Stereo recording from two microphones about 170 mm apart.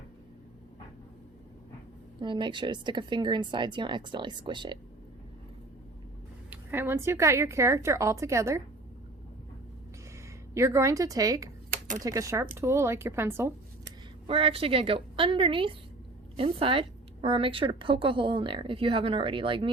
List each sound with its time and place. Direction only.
2.2 s speech: 30° right (ahead or behind)
6.5 s a woman's voice: 10° right (ahead or behind)
10.5 s a woman's voice: 15° right (ahead or behind)
14.3 s a woman's voice: 35° right (ahead or behind)